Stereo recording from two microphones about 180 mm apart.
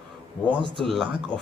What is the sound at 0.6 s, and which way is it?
Speech, 30° right (ahead or behind).